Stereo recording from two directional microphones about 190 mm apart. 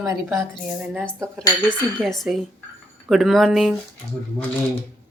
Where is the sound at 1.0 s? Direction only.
5° left (ahead or behind).